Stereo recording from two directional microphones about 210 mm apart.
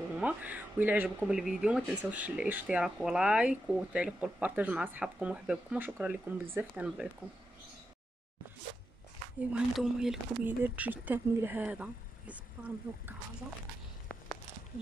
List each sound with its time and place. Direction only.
0.2 s speech: 10° right (ahead or behind)
9.4 s speech: 5° right (ahead or behind)